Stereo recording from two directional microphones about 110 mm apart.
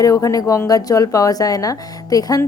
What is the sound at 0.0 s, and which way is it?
A woman's voice, 30° left (ahead or behind).